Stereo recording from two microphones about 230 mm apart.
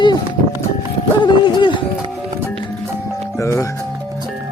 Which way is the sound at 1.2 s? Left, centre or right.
Centre.